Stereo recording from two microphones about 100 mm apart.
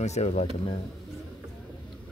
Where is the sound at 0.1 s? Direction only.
90° left.